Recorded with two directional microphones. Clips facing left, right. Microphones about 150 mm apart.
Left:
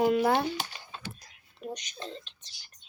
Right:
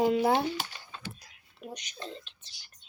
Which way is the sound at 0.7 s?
20° left (ahead or behind).